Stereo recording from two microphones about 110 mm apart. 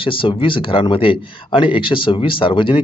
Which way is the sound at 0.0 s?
50° left (ahead or behind).